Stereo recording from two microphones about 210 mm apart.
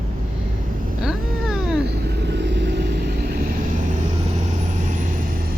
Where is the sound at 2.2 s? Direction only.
55° right (ahead or behind); by 4.0 s 40° right (ahead or behind).